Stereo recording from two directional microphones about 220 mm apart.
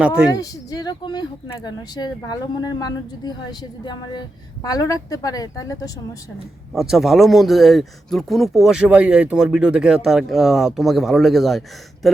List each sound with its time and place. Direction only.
0.0 s speech: 5° right (ahead or behind)
0.3 s speech: 15° left (ahead or behind)
6.7 s speech: centre (ahead or behind)